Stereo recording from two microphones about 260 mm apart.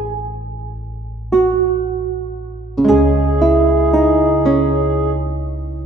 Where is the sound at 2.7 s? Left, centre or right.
Centre.